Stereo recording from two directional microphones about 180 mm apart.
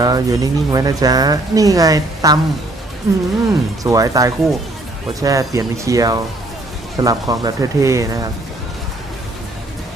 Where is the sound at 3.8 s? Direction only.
20° right (ahead or behind).